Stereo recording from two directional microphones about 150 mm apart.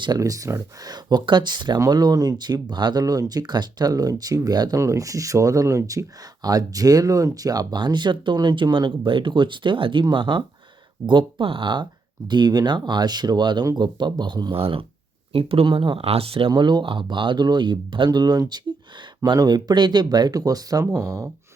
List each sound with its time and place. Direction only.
0.0 s speech: 25° right (ahead or behind)